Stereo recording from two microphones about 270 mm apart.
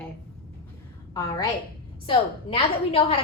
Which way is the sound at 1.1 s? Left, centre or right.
Centre.